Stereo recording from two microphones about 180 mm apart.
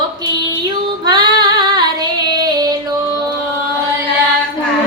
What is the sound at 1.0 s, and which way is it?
Child singing, 20° right (ahead or behind).